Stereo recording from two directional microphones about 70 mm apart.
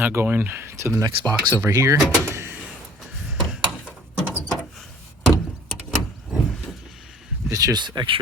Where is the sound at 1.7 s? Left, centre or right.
Right.